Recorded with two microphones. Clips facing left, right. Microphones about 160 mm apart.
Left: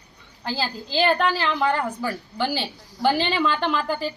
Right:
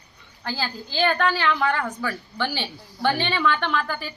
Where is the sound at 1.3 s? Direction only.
30° left (ahead or behind).